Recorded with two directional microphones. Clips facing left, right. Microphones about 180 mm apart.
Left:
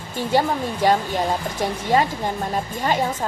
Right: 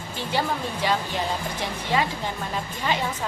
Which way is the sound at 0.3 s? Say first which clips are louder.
Left 6 dB; 45° left (ahead or behind).